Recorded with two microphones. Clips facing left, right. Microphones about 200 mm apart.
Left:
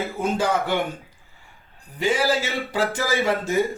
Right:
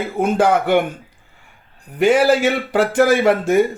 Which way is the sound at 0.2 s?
60° right (ahead or behind).